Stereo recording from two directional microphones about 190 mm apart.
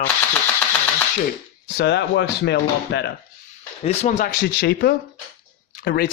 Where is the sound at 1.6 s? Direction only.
60° left (ahead or behind).